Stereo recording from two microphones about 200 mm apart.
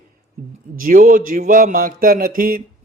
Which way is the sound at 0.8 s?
45° right (ahead or behind).